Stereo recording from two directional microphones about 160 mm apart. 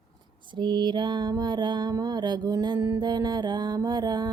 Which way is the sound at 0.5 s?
30° right (ahead or behind).